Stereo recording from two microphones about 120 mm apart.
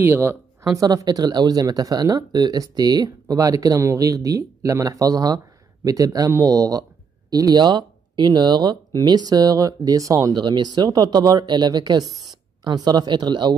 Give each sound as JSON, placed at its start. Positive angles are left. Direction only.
{"t": 0.0, "sound": "speech", "side_deg": -20}
{"t": 0.7, "sound": "speech", "side_deg": -30}